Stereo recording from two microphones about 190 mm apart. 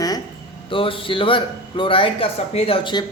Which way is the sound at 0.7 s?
30° left (ahead or behind).